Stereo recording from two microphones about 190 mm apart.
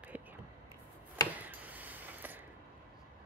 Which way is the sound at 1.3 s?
10° right (ahead or behind).